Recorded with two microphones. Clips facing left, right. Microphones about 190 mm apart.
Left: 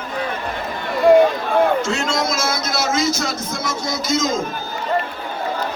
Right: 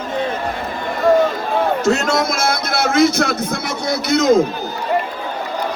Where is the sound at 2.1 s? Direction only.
55° right (ahead or behind).